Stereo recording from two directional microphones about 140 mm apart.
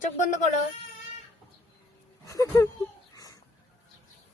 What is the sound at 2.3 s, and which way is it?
Speech, 20° left (ahead or behind).